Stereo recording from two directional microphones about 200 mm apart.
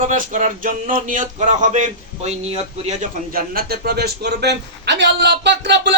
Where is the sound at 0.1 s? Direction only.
40° right (ahead or behind).